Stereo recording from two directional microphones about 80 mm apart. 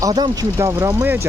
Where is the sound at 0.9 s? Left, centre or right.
Right.